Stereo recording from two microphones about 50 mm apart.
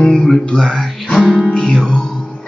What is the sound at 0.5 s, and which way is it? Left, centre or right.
Speech, centre.